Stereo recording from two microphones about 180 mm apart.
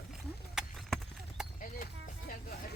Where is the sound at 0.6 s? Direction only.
5° right (ahead or behind).